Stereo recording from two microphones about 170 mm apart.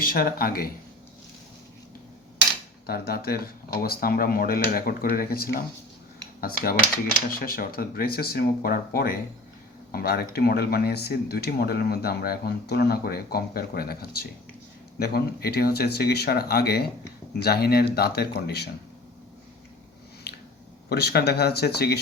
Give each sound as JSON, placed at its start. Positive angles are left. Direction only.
{"t": 0.0, "sound": "speech", "side_deg": 55}
{"t": 2.8, "sound": "speech", "side_deg": 65}
{"t": 7.3, "sound": "speech", "side_deg": 60}
{"t": 20.3, "sound": "a sound", "side_deg": 70}
{"t": 20.9, "sound": "speech", "side_deg": 70}